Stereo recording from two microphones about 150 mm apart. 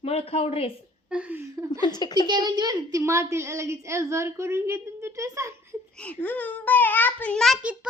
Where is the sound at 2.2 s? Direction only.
30° right (ahead or behind).